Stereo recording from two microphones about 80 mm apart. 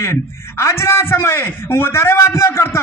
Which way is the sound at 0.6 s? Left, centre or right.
Left.